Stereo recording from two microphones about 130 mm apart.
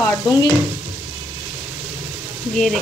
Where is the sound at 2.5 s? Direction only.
5° left (ahead or behind).